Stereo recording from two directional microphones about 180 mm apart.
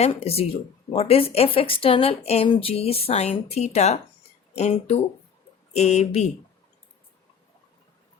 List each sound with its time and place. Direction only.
0.0 s a woman's voice: 35° left (ahead or behind)